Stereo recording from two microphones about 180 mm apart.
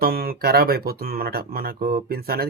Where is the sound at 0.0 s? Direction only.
55° right (ahead or behind).